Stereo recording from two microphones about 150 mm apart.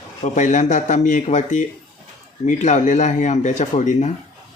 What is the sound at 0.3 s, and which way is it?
Speech, 55° left (ahead or behind).